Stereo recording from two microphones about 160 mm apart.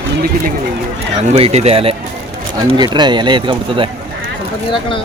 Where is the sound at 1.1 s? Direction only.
40° right (ahead or behind).